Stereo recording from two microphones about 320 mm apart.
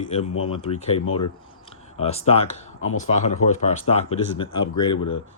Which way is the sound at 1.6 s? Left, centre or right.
Centre.